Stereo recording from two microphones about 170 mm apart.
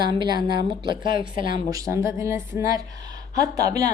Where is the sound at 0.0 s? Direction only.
25° right (ahead or behind).